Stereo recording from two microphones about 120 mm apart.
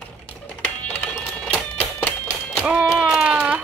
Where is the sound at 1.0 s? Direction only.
15° left (ahead or behind).